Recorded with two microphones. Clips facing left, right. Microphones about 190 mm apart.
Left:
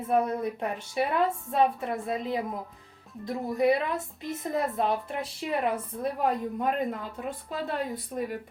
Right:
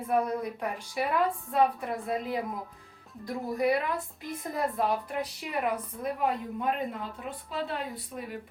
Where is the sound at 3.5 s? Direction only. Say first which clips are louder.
Left 3 dB; 20° left (ahead or behind).